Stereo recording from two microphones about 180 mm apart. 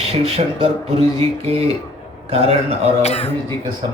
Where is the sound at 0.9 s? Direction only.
35° right (ahead or behind).